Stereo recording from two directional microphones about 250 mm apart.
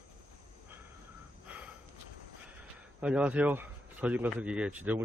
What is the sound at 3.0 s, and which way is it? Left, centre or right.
A man's voice, centre.